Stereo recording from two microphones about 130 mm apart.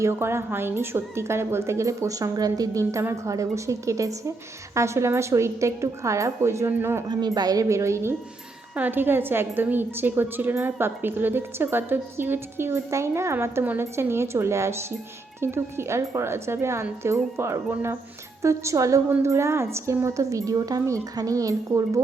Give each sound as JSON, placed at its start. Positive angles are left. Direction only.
{"t": 0.0, "sound": "a woman's voice", "side_deg": -20}
{"t": 7.1, "sound": "a woman's voice", "side_deg": -30}